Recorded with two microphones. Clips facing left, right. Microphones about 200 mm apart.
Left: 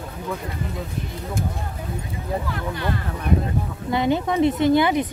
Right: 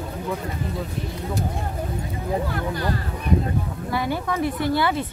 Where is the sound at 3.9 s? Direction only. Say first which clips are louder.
Left 5 dB; 20° left (ahead or behind).